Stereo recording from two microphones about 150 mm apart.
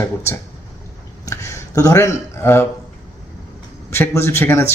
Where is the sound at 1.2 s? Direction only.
20° left (ahead or behind).